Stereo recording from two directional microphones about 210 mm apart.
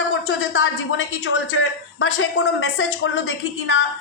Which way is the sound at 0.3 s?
70° left (ahead or behind).